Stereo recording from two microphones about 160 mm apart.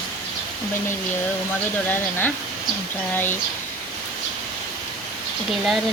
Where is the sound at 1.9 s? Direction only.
10° left (ahead or behind).